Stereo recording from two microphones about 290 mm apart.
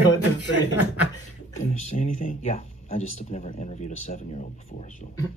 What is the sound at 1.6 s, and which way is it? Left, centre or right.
Speech, left.